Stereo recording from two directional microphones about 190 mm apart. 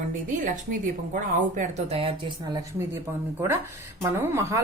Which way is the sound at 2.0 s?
25° right (ahead or behind).